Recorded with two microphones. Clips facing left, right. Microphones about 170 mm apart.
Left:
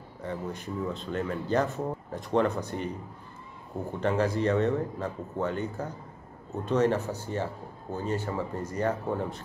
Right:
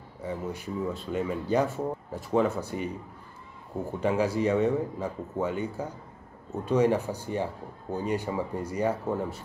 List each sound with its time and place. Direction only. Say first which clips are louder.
0.2 s speech: right 1 dB; 10° right (ahead or behind)
4.0 s speech: right 1 dB; 10° right (ahead or behind)